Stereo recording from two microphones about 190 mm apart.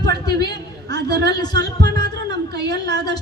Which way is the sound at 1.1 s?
60° right (ahead or behind).